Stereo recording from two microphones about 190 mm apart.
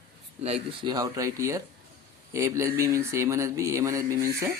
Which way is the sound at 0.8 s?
20° right (ahead or behind).